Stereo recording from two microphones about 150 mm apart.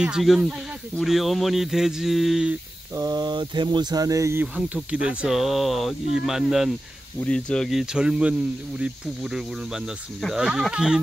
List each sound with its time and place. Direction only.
0.0 s speech: centre (ahead or behind)
2.9 s speech: 25° right (ahead or behind)
4.6 s speech: 5° right (ahead or behind)